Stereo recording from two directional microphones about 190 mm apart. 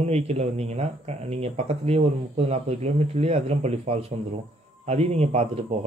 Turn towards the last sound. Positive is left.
turn(degrees=-35)  # may be behind; listen again after turning